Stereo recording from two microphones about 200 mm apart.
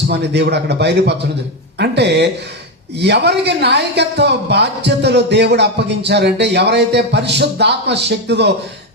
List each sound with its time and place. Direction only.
0.1 s speech: 55° right (ahead or behind)